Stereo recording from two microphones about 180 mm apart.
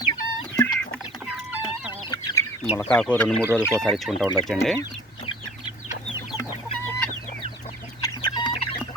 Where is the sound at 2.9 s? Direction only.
5° left (ahead or behind).